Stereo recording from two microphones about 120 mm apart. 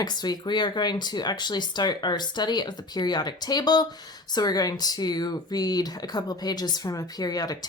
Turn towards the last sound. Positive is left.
turn(degrees=30)  # may be behind; listen again after turning